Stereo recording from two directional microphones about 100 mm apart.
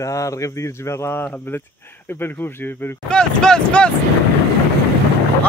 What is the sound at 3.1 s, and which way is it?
Speech, 5° left (ahead or behind).